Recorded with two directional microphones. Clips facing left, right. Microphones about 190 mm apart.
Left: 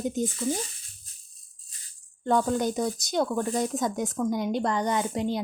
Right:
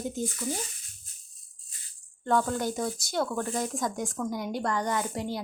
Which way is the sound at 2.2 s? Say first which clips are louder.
Left 3 dB; 20° left (ahead or behind).